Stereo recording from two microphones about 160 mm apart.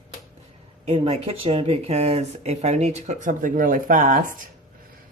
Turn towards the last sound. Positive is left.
turn(degrees=-55)  # may be behind; listen again after turning